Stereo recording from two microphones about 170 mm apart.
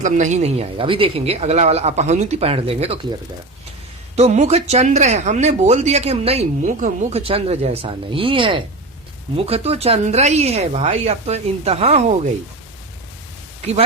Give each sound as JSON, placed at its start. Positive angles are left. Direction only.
{"t": 0.0, "sound": "speech", "side_deg": -45}